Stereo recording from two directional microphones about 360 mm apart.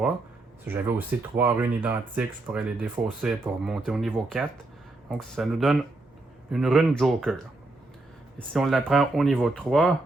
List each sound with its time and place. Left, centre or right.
0.6 s speech: centre
8.4 s speech: centre